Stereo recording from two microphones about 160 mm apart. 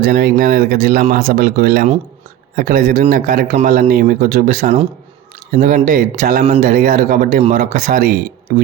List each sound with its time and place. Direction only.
0.0 s a man's voice: 75° right (ahead or behind); by 8.1 s 55° right (ahead or behind)